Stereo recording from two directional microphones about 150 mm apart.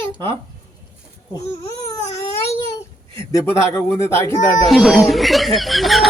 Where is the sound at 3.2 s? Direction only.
20° left (ahead or behind).